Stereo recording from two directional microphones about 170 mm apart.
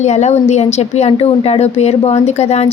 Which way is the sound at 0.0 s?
40° left (ahead or behind).